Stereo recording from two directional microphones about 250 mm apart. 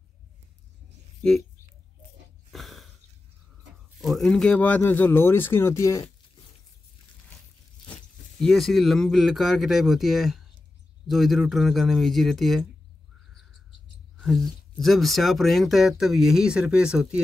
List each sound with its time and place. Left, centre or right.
2.5 s a sound: centre
4.0 s speech: centre
8.4 s speech: centre
14.1 s speech: centre